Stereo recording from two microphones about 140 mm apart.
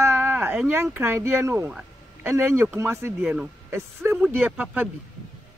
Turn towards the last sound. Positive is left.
turn(degrees=-10)  # may be behind; listen again after turning